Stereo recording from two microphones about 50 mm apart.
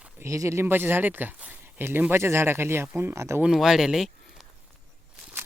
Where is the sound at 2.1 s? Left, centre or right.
Right.